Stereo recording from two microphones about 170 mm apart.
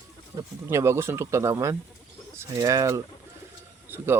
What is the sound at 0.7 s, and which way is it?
Speech, 15° right (ahead or behind).